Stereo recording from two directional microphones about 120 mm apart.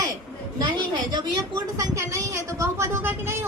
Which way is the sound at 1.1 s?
35° right (ahead or behind).